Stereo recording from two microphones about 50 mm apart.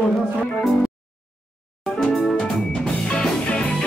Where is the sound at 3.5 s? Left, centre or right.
Left.